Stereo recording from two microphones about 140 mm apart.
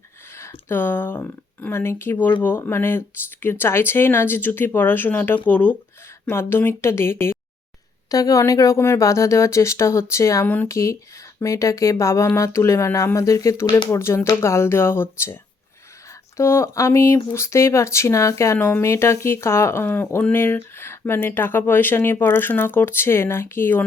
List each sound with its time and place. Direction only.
0.3 s speech: 20° left (ahead or behind)
16.4 s speech: 20° left (ahead or behind)